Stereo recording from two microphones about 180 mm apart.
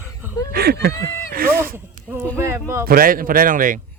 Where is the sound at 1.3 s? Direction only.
55° right (ahead or behind).